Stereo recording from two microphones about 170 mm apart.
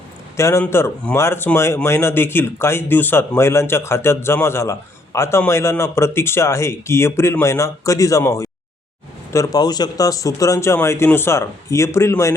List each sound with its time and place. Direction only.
0.3 s speech: 15° left (ahead or behind)